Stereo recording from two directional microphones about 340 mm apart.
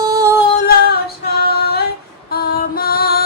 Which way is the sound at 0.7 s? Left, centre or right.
Left.